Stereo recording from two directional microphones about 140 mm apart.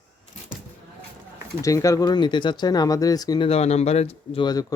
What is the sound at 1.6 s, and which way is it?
Speech, 25° left (ahead or behind).